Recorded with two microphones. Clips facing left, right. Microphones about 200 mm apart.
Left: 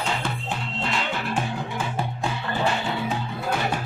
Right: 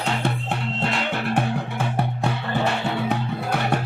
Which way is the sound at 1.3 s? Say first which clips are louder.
Right 4 dB; 60° right (ahead or behind).